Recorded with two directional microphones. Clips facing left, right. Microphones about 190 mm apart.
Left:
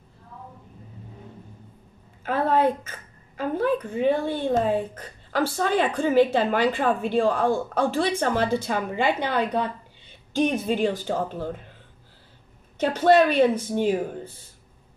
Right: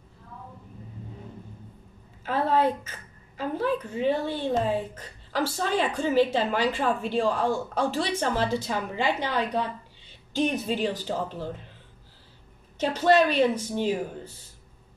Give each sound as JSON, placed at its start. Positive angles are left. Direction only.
{"t": 2.2, "sound": "a woman's voice", "side_deg": 55}
{"t": 12.7, "sound": "a woman's voice", "side_deg": 50}